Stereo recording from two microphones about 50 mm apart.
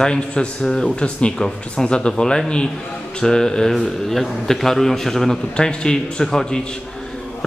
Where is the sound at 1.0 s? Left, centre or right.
Left.